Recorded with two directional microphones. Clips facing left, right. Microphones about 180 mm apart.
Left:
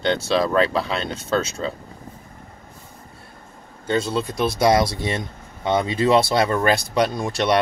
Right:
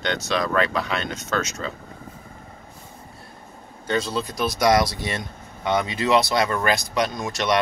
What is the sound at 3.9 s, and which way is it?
Speech, 25° left (ahead or behind).